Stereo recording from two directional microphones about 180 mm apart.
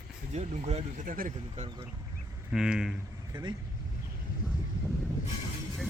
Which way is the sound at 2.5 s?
5° right (ahead or behind).